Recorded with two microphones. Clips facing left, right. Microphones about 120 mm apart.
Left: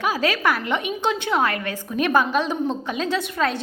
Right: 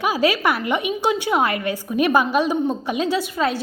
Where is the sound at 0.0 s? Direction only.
10° right (ahead or behind).